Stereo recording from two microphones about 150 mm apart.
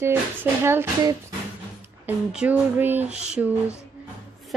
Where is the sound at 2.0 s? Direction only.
10° right (ahead or behind).